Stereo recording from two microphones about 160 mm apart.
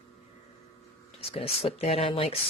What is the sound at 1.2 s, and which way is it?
Speech, 40° left (ahead or behind).